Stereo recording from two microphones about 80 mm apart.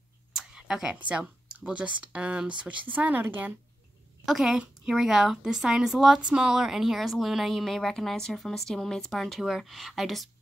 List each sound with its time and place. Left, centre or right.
0.3 s a sound: centre
1.0 s speech: centre
4.3 s a woman's voice: centre